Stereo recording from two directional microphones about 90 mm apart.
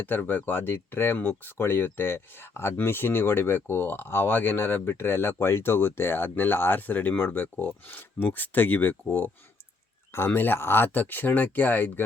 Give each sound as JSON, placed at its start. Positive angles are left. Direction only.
{"t": 0.0, "sound": "speech", "side_deg": 20}